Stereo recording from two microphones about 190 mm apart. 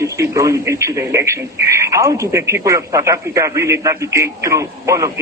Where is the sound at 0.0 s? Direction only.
15° right (ahead or behind).